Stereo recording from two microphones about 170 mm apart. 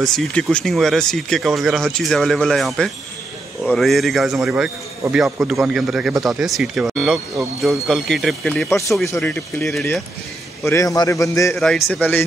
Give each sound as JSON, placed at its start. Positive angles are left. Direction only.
{"t": 0.0, "sound": "speech", "side_deg": 5}
{"t": 8.6, "sound": "speech", "side_deg": 15}
{"t": 10.7, "sound": "a man's voice", "side_deg": 20}
{"t": 11.5, "sound": "speech", "side_deg": 5}